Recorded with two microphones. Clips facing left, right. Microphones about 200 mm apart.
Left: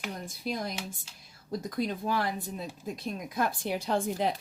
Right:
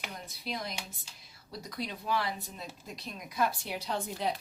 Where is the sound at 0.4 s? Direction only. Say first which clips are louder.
Left 5 dB; 50° left (ahead or behind).